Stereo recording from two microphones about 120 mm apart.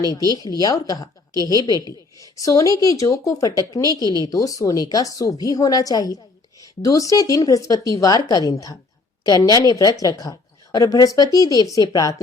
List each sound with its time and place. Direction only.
0.6 s speech: 30° left (ahead or behind)